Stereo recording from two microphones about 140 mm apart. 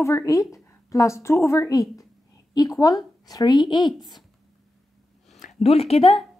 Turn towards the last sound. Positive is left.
turn(degrees=45)  # may be behind; listen again after turning